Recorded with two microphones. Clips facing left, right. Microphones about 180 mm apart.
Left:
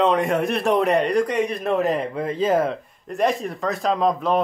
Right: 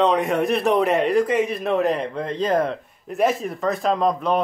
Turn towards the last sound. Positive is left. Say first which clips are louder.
# even
turn(degrees=0)  # may be behind; listen again after turning